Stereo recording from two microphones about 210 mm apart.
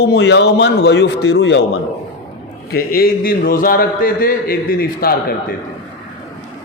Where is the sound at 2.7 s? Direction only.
45° left (ahead or behind).